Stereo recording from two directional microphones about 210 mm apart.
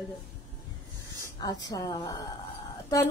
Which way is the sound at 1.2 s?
20° left (ahead or behind).